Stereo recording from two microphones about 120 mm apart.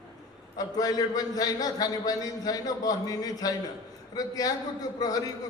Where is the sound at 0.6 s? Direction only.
30° left (ahead or behind).